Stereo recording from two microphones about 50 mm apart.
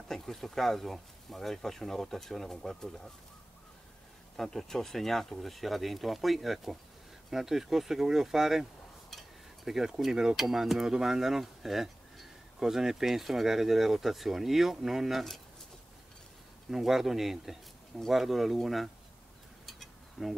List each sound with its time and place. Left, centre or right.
0.1 s speech: centre
4.4 s speech: centre
9.7 s speech: centre
16.7 s speech: centre
19.6 s a sound: centre